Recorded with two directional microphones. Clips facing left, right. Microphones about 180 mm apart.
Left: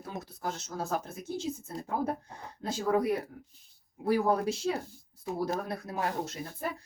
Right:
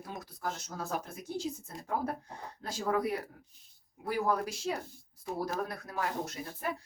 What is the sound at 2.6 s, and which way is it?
Speech, 20° left (ahead or behind).